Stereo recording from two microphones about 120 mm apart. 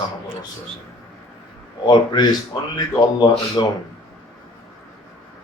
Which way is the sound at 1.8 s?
35° left (ahead or behind).